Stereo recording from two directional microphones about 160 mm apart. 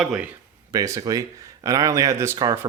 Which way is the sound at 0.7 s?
20° right (ahead or behind).